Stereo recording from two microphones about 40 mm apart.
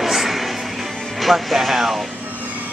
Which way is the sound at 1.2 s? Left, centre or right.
Centre.